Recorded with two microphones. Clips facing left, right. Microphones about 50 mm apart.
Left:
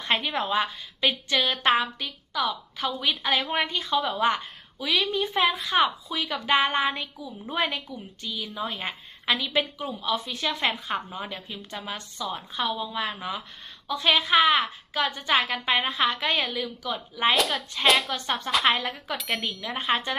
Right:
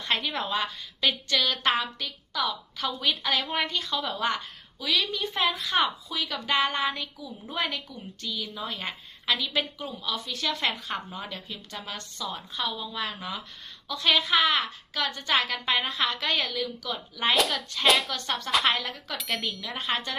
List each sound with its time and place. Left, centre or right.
0.2 s a woman's voice: centre
4.8 s a woman's voice: left
5.3 s a woman's voice: centre
17.3 s speech: centre
18.1 s a woman's voice: centre
19.7 s a woman's voice: left